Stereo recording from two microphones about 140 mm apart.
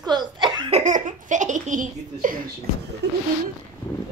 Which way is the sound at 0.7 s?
65° right (ahead or behind).